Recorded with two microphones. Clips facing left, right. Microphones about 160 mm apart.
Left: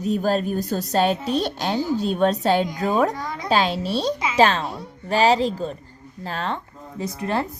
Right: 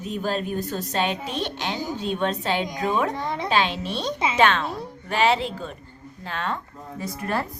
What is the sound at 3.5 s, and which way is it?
A woman's voice, 35° left (ahead or behind).